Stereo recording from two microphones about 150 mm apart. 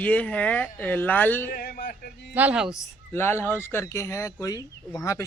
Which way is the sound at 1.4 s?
70° left (ahead or behind).